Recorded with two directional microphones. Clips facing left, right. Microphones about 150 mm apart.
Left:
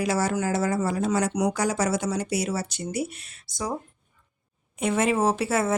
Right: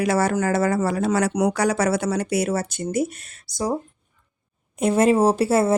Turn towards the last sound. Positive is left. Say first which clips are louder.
# right 6 dB
turn(degrees=-35)  # may be behind; listen again after turning